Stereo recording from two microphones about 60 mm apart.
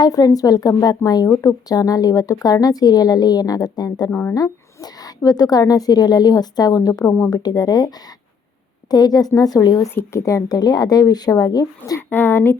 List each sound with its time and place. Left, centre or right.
0.1 s a woman's voice: left
4.1 s speech: left
4.4 s a woman's voice: left
7.3 s a woman's voice: left
9.9 s speech: left
10.2 s a woman's voice: left
11.9 s speech: left